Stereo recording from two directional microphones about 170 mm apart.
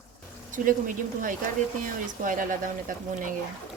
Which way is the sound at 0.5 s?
50° right (ahead or behind).